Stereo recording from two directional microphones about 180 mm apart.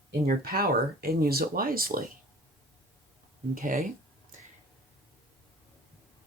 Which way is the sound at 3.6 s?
50° right (ahead or behind).